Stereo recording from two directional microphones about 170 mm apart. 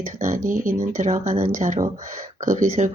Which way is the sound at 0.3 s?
50° right (ahead or behind).